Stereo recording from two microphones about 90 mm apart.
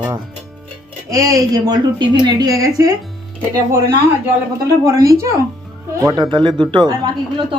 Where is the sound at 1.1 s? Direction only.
40° right (ahead or behind); by 2.5 s 60° right (ahead or behind).